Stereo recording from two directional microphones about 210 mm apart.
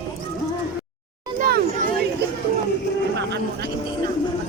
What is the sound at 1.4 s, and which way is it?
Hubbub, 45° right (ahead or behind).